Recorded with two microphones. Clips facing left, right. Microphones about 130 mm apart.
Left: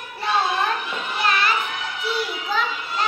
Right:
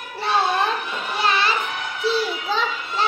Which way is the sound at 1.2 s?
30° right (ahead or behind).